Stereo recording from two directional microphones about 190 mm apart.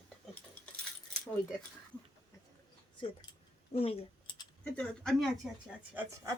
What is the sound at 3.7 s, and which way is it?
Speech, 30° left (ahead or behind).